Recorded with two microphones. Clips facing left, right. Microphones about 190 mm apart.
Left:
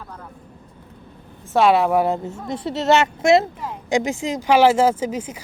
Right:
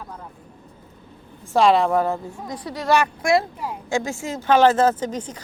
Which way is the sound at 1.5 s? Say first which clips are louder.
Left 1 dB; 5° left (ahead or behind).